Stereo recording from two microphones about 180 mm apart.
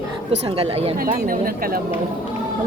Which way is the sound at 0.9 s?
50° right (ahead or behind).